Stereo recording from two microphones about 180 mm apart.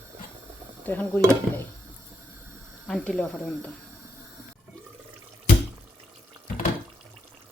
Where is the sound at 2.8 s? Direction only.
5° left (ahead or behind).